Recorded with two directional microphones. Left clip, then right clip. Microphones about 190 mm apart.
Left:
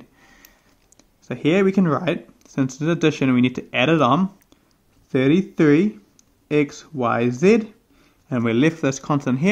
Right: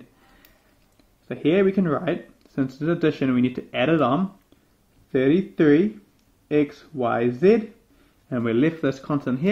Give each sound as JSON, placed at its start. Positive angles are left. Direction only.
{"t": 0.9, "sound": "speech", "side_deg": 40}